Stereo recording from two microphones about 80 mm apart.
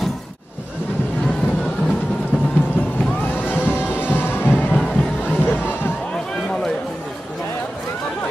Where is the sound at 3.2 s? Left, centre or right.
Left.